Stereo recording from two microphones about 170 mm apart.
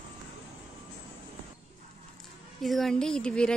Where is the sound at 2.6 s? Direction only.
Centre (ahead or behind).